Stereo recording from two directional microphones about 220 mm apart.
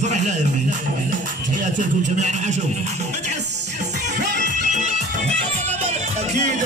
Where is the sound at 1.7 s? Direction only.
30° right (ahead or behind).